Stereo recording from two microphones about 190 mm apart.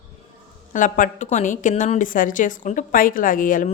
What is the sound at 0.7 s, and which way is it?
A woman's voice, 45° left (ahead or behind).